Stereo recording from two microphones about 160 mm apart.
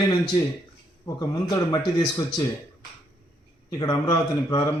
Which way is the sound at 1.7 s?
25° left (ahead or behind).